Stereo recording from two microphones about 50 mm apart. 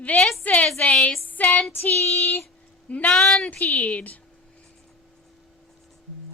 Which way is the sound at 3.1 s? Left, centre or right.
Centre.